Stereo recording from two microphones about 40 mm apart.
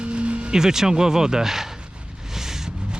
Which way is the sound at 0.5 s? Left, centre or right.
Centre.